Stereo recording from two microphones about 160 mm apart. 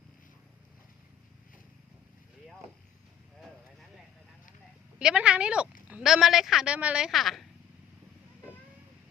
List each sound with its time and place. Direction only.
4.9 s a woman's voice: 5° right (ahead or behind)